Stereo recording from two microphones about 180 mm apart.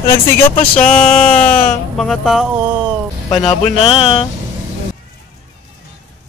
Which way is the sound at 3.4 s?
30° left (ahead or behind).